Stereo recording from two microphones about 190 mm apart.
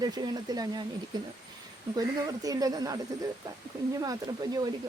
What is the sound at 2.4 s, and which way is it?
Speech, 20° right (ahead or behind).